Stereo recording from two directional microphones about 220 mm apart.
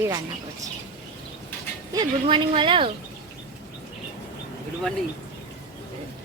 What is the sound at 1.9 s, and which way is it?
Speech, 20° right (ahead or behind).